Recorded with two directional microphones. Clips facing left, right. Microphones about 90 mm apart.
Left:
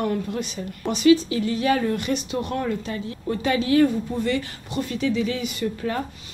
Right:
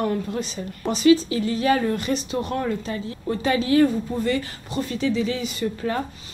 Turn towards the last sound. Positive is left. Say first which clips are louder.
# right 1 dB
turn(degrees=-30)  # may be behind; listen again after turning